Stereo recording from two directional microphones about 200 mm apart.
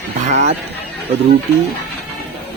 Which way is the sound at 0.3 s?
35° right (ahead or behind).